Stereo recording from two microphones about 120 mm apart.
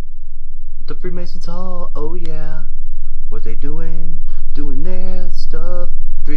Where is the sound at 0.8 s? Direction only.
15° left (ahead or behind).